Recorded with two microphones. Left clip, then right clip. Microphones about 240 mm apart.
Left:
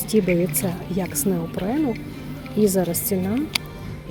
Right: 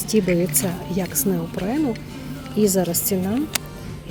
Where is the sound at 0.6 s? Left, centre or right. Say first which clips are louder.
Right 1 dB; centre.